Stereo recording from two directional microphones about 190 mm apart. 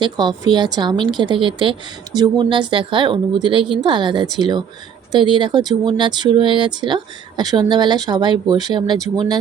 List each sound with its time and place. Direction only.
0.0 s speech: 25° right (ahead or behind)